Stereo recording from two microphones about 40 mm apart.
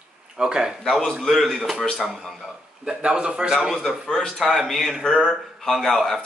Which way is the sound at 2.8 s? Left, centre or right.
Right.